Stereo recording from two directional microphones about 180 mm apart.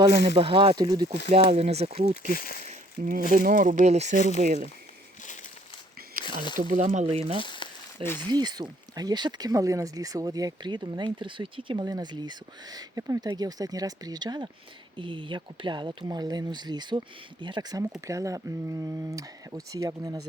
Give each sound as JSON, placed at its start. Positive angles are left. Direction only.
{"t": 0.3, "sound": "speech", "side_deg": -30}
{"t": 1.5, "sound": "speech", "side_deg": -35}
{"t": 2.3, "sound": "speech", "side_deg": 55}
{"t": 3.0, "sound": "speech", "side_deg": -50}
{"t": 6.2, "sound": "speech", "side_deg": 25}
{"t": 6.6, "sound": "speech", "side_deg": -45}
{"t": 7.3, "sound": "speech", "side_deg": 25}
{"t": 8.0, "sound": "speech", "side_deg": 10}
{"t": 8.3, "sound": "speech", "side_deg": -25}